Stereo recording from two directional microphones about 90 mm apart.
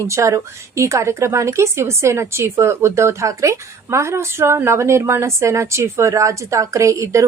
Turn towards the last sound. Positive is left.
turn(degrees=-35)  # may be behind; listen again after turning